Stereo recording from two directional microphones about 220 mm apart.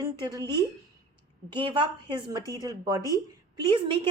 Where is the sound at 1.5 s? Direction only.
20° right (ahead or behind).